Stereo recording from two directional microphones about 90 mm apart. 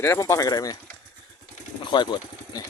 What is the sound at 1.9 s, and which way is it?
Speech, 55° left (ahead or behind).